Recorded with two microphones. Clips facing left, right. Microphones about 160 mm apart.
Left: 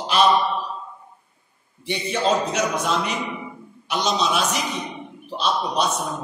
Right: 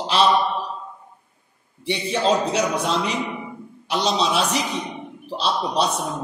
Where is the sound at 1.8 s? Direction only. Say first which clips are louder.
Right 1 dB; 30° right (ahead or behind).